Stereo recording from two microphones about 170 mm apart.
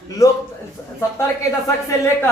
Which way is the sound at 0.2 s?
20° left (ahead or behind).